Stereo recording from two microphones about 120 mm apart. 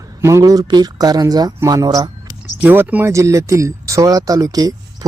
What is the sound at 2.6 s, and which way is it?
Speech, 15° right (ahead or behind).